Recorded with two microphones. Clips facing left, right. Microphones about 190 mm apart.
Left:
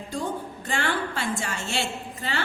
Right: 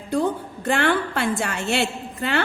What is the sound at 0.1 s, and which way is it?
A woman's voice, 60° right (ahead or behind).